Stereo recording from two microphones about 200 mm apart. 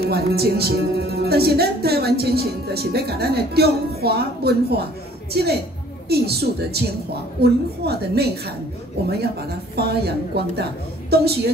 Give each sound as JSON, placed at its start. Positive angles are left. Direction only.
{"t": 0.0, "sound": "speech", "side_deg": -50}
{"t": 9.8, "sound": "speech", "side_deg": -55}